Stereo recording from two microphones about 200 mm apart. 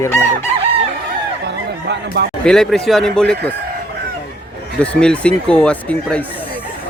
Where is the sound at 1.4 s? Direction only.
55° right (ahead or behind).